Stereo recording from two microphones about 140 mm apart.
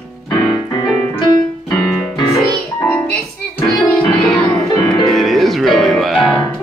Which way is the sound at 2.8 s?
10° left (ahead or behind).